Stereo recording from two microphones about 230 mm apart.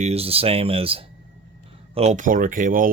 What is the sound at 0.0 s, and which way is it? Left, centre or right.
Speech, right.